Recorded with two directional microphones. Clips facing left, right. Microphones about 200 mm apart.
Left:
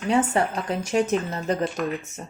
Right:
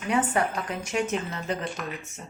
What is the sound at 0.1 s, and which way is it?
Speech, 30° left (ahead or behind).